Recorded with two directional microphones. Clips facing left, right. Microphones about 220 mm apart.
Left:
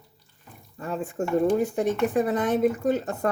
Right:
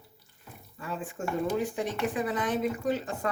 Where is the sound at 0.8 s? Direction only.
40° left (ahead or behind).